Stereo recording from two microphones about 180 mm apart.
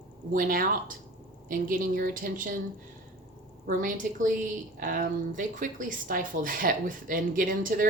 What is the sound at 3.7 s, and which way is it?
Speech, 45° right (ahead or behind).